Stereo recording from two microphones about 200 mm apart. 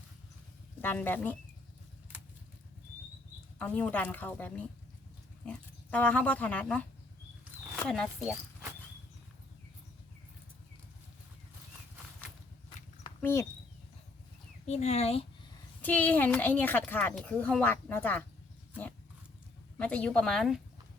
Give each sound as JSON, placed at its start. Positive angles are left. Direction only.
{"t": 0.8, "sound": "a woman's voice", "side_deg": 10}
{"t": 3.6, "sound": "a woman's voice", "side_deg": 5}
{"t": 13.2, "sound": "a woman's voice", "side_deg": 10}
{"t": 14.7, "sound": "speech", "side_deg": 35}
{"t": 15.8, "sound": "a woman's voice", "side_deg": 10}
{"t": 19.8, "sound": "speech", "side_deg": 5}